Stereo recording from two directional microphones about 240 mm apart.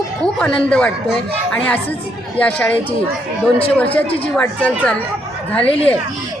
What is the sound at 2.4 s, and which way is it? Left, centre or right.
A woman's voice, centre.